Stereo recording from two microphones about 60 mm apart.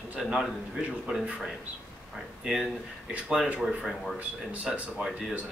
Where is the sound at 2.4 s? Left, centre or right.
Centre.